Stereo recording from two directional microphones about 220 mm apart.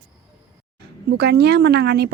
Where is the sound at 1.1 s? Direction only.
50° right (ahead or behind).